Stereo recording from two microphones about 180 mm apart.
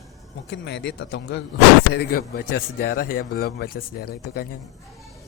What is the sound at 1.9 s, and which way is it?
Speech, 60° left (ahead or behind).